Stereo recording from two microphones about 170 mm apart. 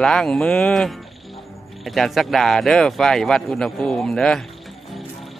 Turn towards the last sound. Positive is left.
turn(degrees=5)  # may be behind; listen again after turning